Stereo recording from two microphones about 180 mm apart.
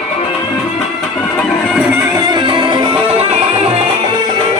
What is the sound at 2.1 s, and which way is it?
Music, 25° right (ahead or behind).